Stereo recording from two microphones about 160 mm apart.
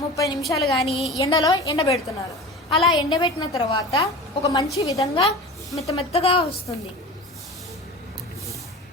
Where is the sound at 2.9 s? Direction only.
25° left (ahead or behind).